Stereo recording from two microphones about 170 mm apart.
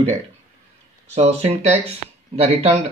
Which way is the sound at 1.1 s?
40° right (ahead or behind).